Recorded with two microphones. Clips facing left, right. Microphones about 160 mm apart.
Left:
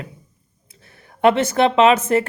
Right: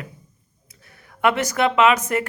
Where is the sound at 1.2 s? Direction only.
30° left (ahead or behind).